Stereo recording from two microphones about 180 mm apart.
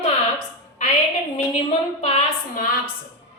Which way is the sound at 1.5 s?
35° left (ahead or behind).